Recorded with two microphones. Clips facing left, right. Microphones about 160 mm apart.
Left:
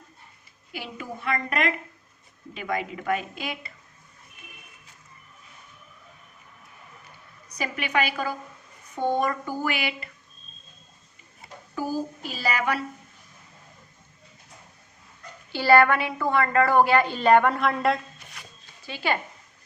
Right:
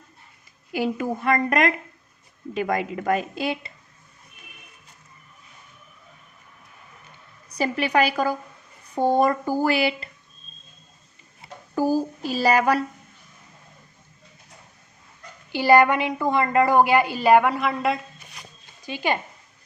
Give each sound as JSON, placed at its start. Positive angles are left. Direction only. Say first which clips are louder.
{"t": 0.7, "sound": "a woman's voice", "louder": "right 11 dB", "side_deg": -45}
{"t": 7.5, "sound": "speech", "louder": "right 5 dB", "side_deg": -35}
{"t": 11.7, "sound": "speech", "louder": "right 7 dB", "side_deg": -40}
{"t": 15.5, "sound": "a woman's voice", "louder": "right 2 dB", "side_deg": -15}
{"t": 18.8, "sound": "speech", "louder": "right 2 dB", "side_deg": -15}